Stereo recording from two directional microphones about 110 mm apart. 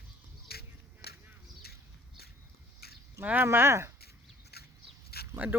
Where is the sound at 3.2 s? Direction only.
20° right (ahead or behind).